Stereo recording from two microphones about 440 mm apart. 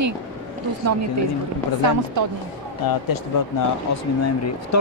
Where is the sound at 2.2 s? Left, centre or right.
Right.